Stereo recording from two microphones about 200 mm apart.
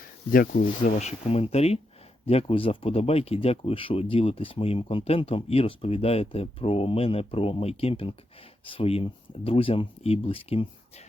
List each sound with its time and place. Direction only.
0.3 s speech: 45° left (ahead or behind); by 11.0 s 30° left (ahead or behind)